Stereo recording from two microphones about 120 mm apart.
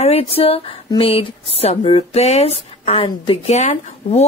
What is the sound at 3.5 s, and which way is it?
Speech, 70° left (ahead or behind).